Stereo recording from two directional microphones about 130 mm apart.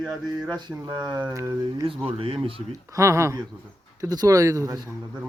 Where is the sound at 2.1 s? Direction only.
45° right (ahead or behind).